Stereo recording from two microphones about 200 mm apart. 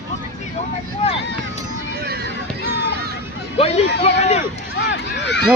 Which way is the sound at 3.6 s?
30° left (ahead or behind).